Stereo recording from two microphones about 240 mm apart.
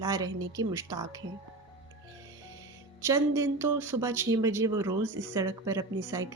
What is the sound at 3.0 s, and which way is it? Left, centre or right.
Speech, centre.